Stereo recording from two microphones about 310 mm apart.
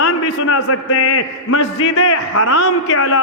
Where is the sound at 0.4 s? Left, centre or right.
Left.